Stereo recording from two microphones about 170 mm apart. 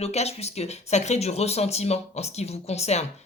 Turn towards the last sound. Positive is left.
turn(degrees=40)  # may be behind; listen again after turning